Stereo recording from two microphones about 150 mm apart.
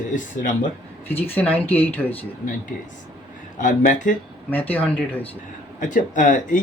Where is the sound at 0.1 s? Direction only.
60° left (ahead or behind).